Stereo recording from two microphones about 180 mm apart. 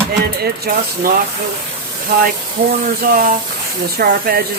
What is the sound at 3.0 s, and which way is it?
Speech, 50° right (ahead or behind).